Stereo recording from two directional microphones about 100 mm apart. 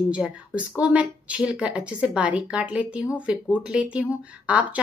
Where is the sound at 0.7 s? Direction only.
15° right (ahead or behind).